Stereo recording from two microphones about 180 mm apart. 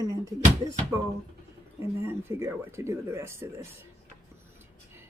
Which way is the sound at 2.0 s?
15° right (ahead or behind).